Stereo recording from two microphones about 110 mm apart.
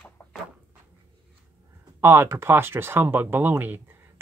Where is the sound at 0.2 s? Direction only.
10° left (ahead or behind).